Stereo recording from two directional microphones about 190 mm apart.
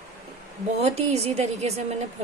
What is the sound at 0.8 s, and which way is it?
A woman's voice, 35° right (ahead or behind).